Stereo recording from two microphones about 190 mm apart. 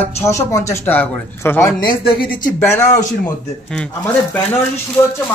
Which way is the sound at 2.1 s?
50° left (ahead or behind).